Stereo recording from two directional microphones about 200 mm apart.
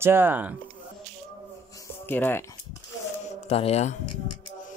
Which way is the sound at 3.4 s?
30° left (ahead or behind).